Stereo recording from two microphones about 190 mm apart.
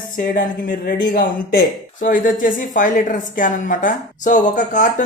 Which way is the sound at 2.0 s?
45° left (ahead or behind).